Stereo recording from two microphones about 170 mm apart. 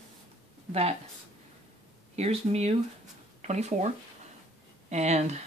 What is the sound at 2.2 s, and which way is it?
Speech, 40° right (ahead or behind).